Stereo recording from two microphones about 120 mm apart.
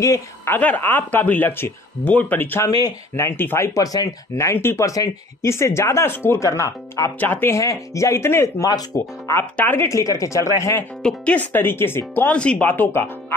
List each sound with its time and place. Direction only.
0.5 s speech: 15° left (ahead or behind)
11.0 s speech: 10° left (ahead or behind)